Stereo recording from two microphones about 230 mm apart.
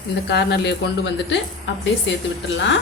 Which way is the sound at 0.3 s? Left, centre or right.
Left.